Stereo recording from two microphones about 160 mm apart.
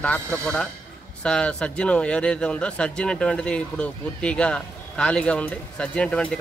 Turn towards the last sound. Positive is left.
turn(degrees=5)  # may be behind; listen again after turning